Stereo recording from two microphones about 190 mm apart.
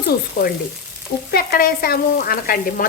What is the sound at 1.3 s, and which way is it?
Speech, 50° left (ahead or behind).